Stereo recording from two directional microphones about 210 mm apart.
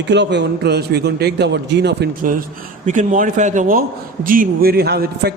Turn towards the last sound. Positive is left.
turn(degrees=-50)  # may be behind; listen again after turning